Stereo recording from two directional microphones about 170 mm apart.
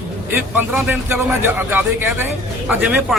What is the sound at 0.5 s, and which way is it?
Speech, 10° right (ahead or behind).